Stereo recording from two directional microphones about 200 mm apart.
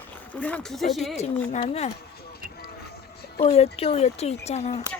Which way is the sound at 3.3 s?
30° left (ahead or behind).